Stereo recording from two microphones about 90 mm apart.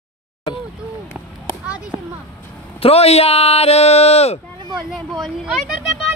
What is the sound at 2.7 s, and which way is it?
Speech, 90° left.